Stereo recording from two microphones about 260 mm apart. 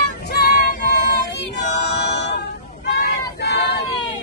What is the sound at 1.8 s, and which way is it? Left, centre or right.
Choir, left.